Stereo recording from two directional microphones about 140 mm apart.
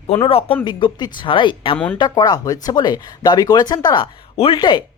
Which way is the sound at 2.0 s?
30° left (ahead or behind).